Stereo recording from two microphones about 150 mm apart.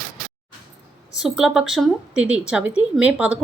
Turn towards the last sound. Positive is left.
turn(degrees=-10)  # may be behind; listen again after turning